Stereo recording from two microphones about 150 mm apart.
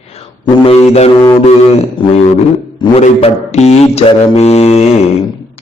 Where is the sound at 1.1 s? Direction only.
25° left (ahead or behind).